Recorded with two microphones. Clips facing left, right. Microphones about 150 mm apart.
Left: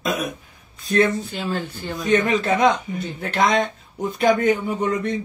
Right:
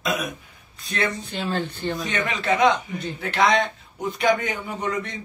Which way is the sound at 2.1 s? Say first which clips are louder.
Left 8 dB; 45° left (ahead or behind).